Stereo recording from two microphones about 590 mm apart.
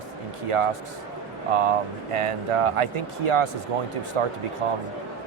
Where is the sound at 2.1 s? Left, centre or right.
Right.